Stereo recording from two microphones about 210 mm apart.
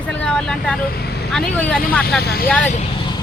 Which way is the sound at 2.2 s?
50° left (ahead or behind).